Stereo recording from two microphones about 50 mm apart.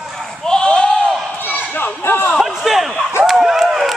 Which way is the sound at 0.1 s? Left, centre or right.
Centre.